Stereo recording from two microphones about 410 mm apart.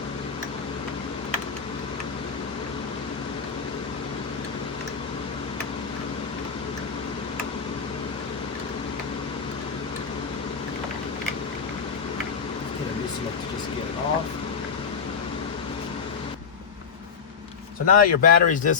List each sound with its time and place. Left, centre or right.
17.8 s speech: centre